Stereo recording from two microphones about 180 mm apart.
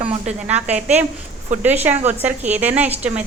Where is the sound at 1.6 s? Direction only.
10° right (ahead or behind).